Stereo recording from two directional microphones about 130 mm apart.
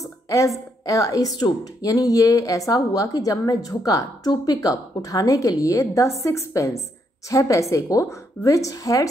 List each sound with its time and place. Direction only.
0.8 s a woman's voice: 25° left (ahead or behind)